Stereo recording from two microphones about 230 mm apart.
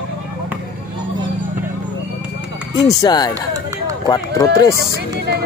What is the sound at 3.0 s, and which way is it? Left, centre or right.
Speech, centre.